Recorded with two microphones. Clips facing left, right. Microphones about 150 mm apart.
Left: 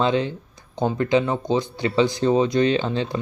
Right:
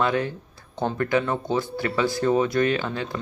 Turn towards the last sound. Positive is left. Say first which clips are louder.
# left 4 dB
turn(degrees=25)  # may be behind; listen again after turning